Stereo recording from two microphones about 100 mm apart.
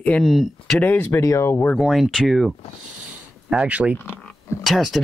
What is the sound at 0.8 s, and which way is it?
Speech, 20° left (ahead or behind).